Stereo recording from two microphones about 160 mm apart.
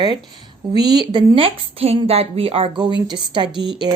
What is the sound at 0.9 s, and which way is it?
A woman's voice, 25° right (ahead or behind).